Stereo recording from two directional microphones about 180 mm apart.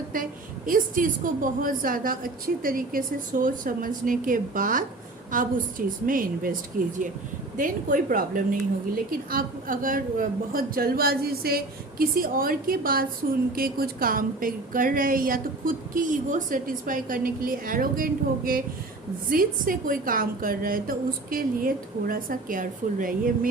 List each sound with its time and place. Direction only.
0.1 s a woman's voice: 50° right (ahead or behind)
6.1 s a woman's voice: 50° right (ahead or behind)